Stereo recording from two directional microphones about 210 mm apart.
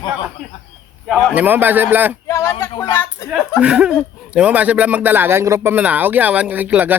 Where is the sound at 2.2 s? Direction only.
15° left (ahead or behind).